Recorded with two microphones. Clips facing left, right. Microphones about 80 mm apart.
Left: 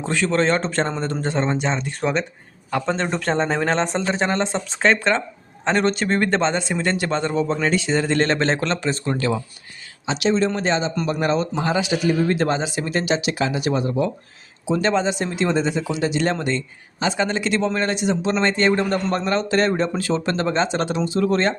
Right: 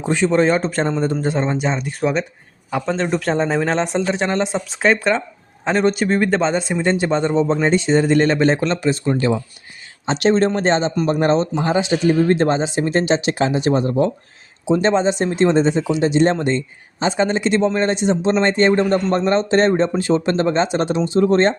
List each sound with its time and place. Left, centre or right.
0.0 s a man's voice: centre
10.1 s a man's voice: right
14.6 s speech: right